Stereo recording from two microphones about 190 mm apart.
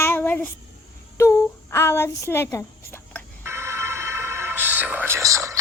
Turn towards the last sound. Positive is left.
turn(degrees=-15)  # may be behind; listen again after turning